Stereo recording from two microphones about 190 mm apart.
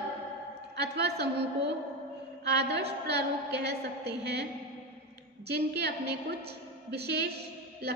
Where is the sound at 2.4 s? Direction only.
60° right (ahead or behind).